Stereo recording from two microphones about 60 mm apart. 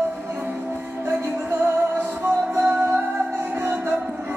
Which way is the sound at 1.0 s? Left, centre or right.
Right.